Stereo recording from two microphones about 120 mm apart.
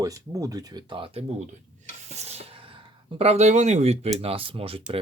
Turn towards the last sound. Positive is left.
turn(degrees=-50)  # may be behind; listen again after turning